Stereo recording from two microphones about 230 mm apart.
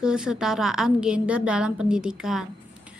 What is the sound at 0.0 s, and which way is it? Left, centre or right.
A woman's voice, centre.